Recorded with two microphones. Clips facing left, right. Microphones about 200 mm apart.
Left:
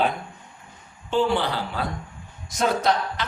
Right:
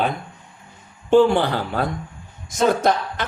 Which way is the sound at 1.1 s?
50° right (ahead or behind).